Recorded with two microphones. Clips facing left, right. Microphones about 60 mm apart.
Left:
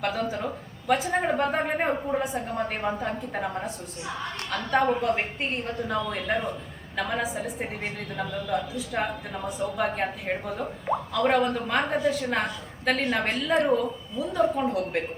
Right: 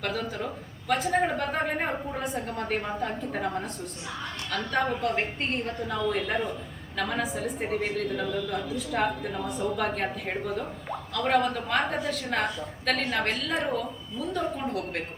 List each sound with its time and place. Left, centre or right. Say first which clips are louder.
0.0 s a woman's voice: left 3 dB; centre
4.5 s a woman's voice: left 4 dB; centre
4.9 s a woman's voice: left 2 dB; centre